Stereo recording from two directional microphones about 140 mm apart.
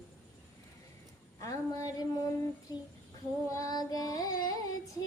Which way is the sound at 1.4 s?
25° left (ahead or behind).